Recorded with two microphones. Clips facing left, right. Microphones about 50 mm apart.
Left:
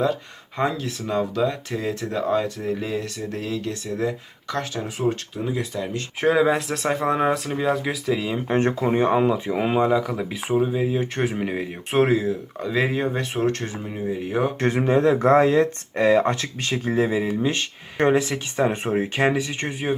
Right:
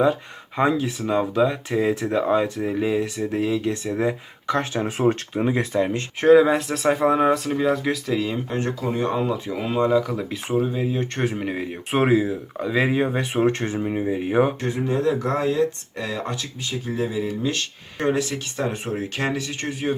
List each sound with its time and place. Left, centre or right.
0.0 s speech: centre
4.9 s speech: right
6.1 s speech: centre
8.4 s speech: left
9.0 s speech: left
9.9 s speech: centre
14.6 s speech: left
14.9 s speech: left
16.3 s speech: left
17.2 s speech: left